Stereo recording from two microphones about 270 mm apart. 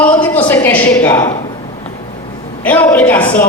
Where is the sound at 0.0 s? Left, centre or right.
Centre.